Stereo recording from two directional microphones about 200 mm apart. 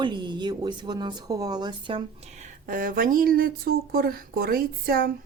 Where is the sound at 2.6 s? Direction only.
45° right (ahead or behind).